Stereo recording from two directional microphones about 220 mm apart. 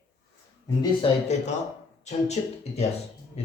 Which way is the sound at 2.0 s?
30° left (ahead or behind).